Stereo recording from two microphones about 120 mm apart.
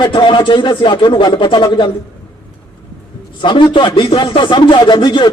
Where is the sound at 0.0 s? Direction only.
40° left (ahead or behind).